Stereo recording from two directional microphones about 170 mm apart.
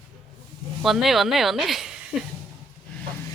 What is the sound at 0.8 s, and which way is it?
Speech, centre (ahead or behind).